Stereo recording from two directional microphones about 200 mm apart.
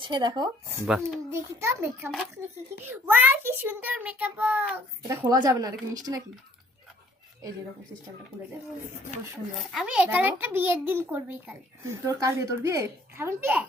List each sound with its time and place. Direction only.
0.0 s speech: 20° right (ahead or behind)
0.9 s a child's voice: centre (ahead or behind)
1.3 s a child's voice: 10° right (ahead or behind)
3.1 s a child's voice: 10° right (ahead or behind)
5.2 s speech: 20° right (ahead or behind)
9.7 s a child's voice: 5° right (ahead or behind)